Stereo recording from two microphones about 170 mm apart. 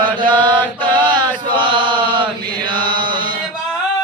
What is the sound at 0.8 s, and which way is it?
Mantra, 30° right (ahead or behind).